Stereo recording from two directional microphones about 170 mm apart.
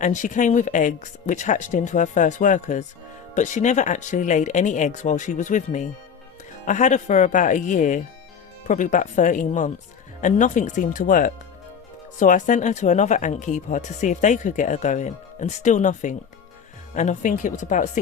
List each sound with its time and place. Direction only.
0.0 s speech: 45° left (ahead or behind)